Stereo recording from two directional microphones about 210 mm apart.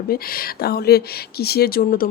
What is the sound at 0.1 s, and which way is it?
Speech, 45° left (ahead or behind).